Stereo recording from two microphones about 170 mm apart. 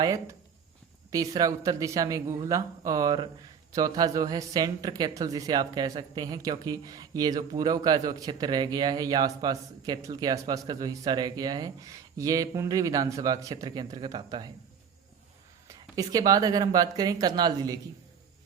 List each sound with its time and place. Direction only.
0.0 s speech: 20° right (ahead or behind)
15.6 s speech: 20° right (ahead or behind)